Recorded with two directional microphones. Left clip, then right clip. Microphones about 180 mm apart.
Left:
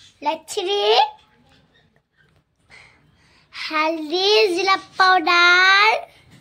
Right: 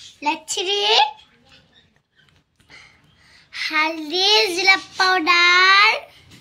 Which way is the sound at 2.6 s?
60° left (ahead or behind).